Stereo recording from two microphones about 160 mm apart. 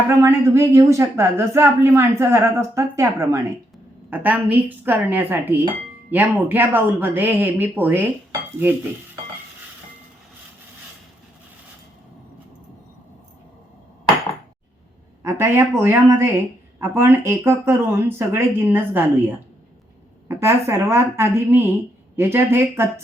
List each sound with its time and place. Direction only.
0.2 s speech: 15° right (ahead or behind)
15.2 s speech: 15° right (ahead or behind)
20.2 s speech: 15° right (ahead or behind)